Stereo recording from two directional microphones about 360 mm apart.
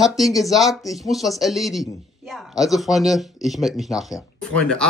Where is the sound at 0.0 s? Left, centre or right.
Centre.